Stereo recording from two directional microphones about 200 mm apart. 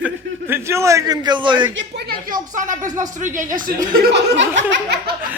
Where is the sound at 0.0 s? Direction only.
10° right (ahead or behind).